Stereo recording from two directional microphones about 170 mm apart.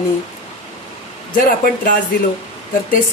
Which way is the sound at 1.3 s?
55° left (ahead or behind).